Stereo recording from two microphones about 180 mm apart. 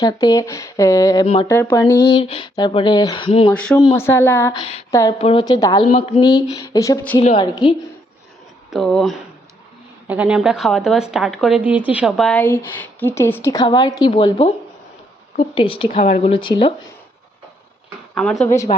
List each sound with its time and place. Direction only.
0.0 s speech: 20° left (ahead or behind)
2.0 s speech: 30° left (ahead or behind)
3.5 s speech: 5° left (ahead or behind)
7.2 s a woman's voice: 35° left (ahead or behind)
8.7 s speech: centre (ahead or behind); by 16.7 s 30° left (ahead or behind)
18.1 s speech: 5° left (ahead or behind)
18.4 s speech: 15° left (ahead or behind)